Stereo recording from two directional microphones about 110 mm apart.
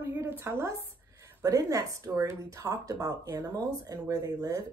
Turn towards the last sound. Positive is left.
turn(degrees=-35)  # may be behind; listen again after turning